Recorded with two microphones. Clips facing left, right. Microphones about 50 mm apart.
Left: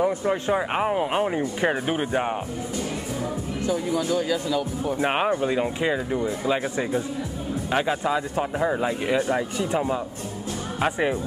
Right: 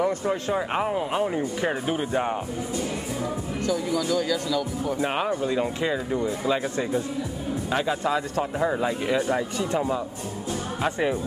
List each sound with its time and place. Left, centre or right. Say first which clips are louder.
0.0 s speech: left 2 dB; centre
3.6 s speech: left 1 dB; left
8.4 s speech: left 1 dB; centre